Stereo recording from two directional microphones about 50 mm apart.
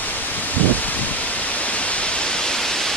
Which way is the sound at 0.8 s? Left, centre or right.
Left.